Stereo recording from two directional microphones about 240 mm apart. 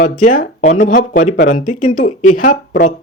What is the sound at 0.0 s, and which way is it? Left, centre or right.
Speech, left.